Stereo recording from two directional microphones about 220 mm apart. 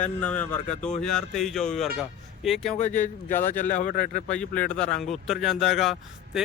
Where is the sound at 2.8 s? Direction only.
30° left (ahead or behind).